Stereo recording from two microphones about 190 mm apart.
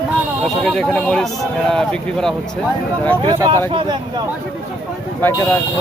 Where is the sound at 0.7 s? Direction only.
5° left (ahead or behind).